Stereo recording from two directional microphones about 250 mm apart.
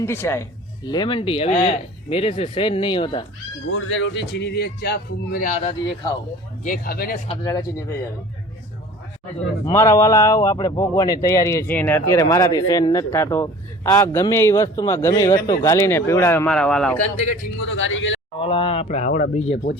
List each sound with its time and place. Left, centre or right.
0.0 s a man's voice: centre
3.7 s a man's voice: left
7.3 s a man's voice: centre
9.6 s a man's voice: centre
17.0 s speech: left
17.6 s speech: left
18.3 s speech: left